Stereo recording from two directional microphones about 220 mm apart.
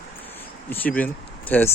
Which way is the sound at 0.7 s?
10° left (ahead or behind).